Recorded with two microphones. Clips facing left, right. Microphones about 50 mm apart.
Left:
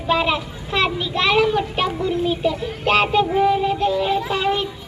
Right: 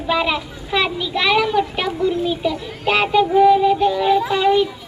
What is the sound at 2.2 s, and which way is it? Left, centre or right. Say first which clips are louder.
Speech: even; centre.